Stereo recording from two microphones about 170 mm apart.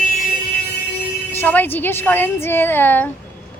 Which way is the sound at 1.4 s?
10° left (ahead or behind).